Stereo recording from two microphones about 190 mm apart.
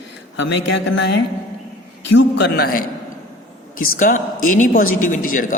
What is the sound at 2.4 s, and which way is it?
Speech, 60° left (ahead or behind).